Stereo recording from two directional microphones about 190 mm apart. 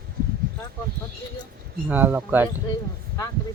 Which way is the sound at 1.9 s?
10° right (ahead or behind).